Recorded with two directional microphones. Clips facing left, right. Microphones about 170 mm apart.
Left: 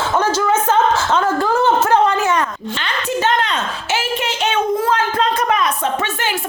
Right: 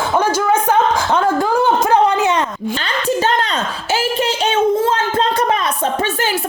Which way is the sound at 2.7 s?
35° right (ahead or behind).